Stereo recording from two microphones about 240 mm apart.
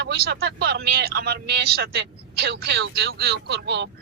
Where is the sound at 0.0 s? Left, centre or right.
Right.